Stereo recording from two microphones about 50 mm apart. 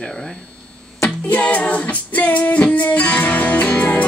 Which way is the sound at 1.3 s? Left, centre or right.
Left.